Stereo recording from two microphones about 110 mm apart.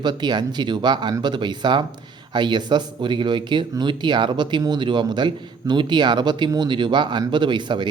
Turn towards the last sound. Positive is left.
turn(degrees=-45)  # may be behind; listen again after turning